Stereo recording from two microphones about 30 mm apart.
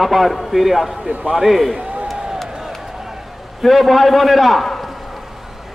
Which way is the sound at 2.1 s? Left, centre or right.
Right.